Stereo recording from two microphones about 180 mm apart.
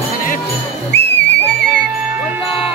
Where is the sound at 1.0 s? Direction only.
70° left (ahead or behind).